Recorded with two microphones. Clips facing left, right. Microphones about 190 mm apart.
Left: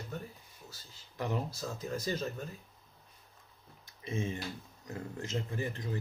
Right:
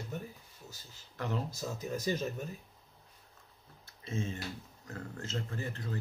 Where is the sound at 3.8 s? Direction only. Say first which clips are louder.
Left 1 dB; 15° left (ahead or behind).